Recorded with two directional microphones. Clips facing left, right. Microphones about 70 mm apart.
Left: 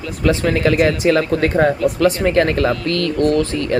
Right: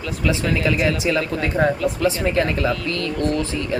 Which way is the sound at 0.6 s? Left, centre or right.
Left.